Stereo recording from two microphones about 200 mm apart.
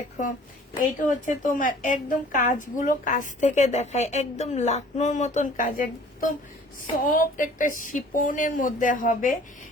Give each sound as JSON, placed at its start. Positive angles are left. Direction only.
{"t": 0.2, "sound": "a woman's voice", "side_deg": 40}